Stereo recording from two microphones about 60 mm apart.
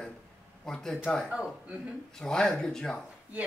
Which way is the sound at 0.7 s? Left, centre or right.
Centre.